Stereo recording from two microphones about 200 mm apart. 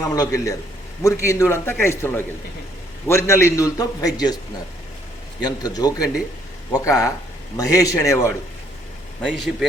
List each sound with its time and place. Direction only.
0.0 s a man's voice: 15° left (ahead or behind)
5.4 s a man's voice: 20° left (ahead or behind)
9.2 s a man's voice: centre (ahead or behind)